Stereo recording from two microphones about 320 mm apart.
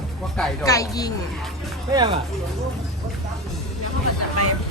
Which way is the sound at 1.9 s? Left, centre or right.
Centre.